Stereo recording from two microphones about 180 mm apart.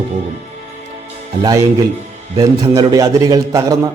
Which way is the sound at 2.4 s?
20° right (ahead or behind).